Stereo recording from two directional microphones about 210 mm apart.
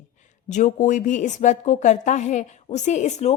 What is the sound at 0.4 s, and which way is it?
Speech, 35° left (ahead or behind).